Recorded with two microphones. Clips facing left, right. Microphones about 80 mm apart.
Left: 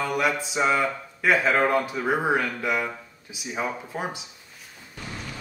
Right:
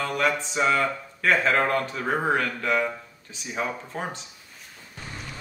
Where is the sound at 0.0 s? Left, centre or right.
Centre.